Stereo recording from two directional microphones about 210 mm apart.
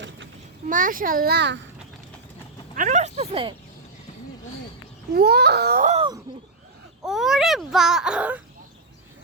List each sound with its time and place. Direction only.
0.7 s a child's voice: 40° right (ahead or behind)
2.7 s a child's voice: 35° right (ahead or behind)
5.1 s speech: 50° right (ahead or behind)
6.0 s speech: 20° right (ahead or behind)
7.0 s speech: centre (ahead or behind)